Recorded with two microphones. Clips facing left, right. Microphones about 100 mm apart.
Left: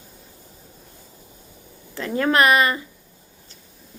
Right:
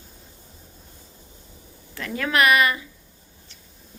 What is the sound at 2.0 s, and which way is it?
Speech, 30° left (ahead or behind).